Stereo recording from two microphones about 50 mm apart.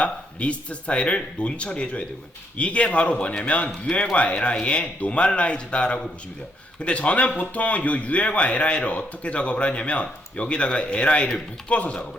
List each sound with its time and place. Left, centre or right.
0.0 s speech: left